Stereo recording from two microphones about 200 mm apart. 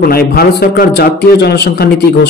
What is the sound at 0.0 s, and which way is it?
Speech, 50° left (ahead or behind).